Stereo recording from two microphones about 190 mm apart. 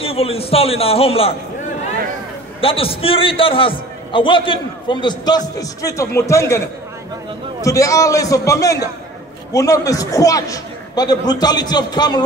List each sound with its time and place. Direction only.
0.0 s a man's voice: 30° left (ahead or behind)
2.6 s a man's voice: 30° left (ahead or behind)
7.6 s a man's voice: 15° left (ahead or behind)